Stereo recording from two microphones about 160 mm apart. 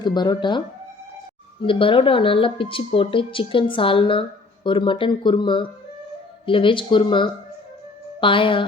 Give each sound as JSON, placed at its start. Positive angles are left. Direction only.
{"t": 0.0, "sound": "speech", "side_deg": 25}
{"t": 1.6, "sound": "speech", "side_deg": 35}